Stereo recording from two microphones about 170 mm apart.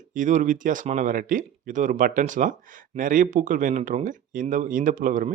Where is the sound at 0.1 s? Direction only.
50° right (ahead or behind).